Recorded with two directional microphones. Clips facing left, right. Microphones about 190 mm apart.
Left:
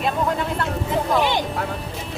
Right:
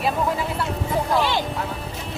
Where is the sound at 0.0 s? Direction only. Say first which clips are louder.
Left 1 dB; centre (ahead or behind).